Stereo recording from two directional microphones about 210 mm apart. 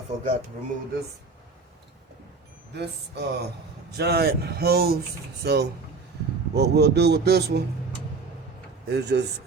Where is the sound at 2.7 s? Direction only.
55° right (ahead or behind).